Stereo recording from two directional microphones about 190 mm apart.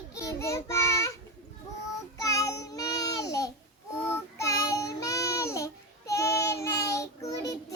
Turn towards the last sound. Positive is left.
turn(degrees=20)  # may be behind; listen again after turning